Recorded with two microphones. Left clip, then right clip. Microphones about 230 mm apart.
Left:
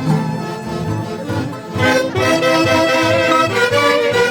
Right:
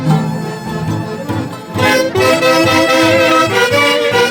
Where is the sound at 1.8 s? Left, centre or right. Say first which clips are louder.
Right 3 dB; right.